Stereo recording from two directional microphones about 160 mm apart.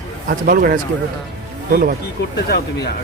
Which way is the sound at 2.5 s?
90° left.